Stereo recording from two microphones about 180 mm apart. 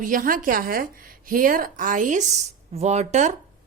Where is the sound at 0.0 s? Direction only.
50° right (ahead or behind).